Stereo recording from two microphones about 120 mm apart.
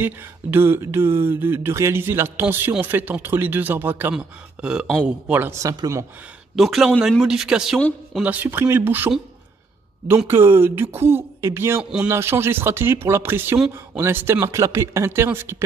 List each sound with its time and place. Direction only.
0.0 s speech: 20° right (ahead or behind)
5.6 s speech: 30° right (ahead or behind)
6.5 s speech: centre (ahead or behind); by 11.8 s 20° right (ahead or behind)
11.8 s speech: 10° right (ahead or behind)
12.1 s speech: 20° right (ahead or behind)